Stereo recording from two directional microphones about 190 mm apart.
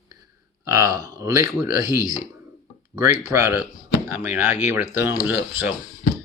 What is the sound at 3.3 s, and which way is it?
Speech, 15° right (ahead or behind).